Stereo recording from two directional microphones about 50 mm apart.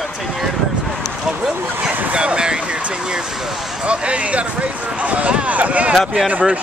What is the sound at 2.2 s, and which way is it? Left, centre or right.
Speech, centre.